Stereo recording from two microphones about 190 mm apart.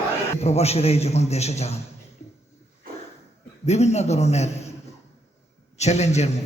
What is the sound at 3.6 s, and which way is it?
A man's voice, 35° left (ahead or behind).